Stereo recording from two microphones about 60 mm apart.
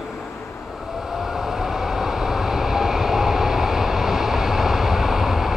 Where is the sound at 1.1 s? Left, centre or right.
Centre.